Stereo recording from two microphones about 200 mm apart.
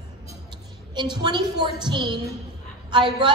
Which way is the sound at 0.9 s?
20° right (ahead or behind).